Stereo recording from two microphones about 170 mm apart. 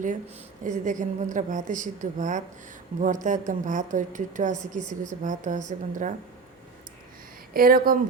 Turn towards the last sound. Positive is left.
turn(degrees=-55)  # may be behind; listen again after turning